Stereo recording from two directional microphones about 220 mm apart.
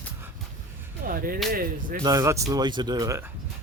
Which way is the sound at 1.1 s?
40° right (ahead or behind).